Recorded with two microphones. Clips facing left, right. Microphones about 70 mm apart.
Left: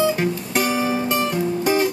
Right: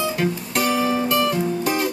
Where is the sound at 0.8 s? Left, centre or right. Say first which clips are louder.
Right 1 dB; left.